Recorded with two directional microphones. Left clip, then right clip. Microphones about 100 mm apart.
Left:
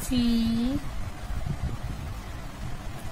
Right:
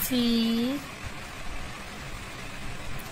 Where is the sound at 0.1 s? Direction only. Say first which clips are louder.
Even; 25° right (ahead or behind).